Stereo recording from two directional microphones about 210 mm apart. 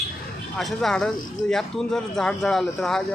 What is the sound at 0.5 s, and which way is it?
Speech, centre (ahead or behind).